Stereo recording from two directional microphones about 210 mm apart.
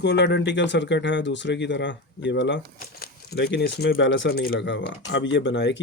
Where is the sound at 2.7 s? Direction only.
45° left (ahead or behind).